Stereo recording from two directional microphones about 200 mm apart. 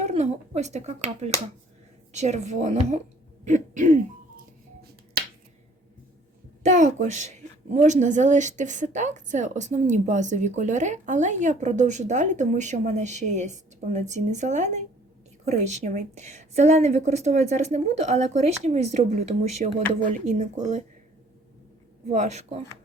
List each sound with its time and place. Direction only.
0.0 s a woman's voice: 35° right (ahead or behind)
6.6 s a woman's voice: 35° right (ahead or behind)
22.1 s a woman's voice: 35° right (ahead or behind)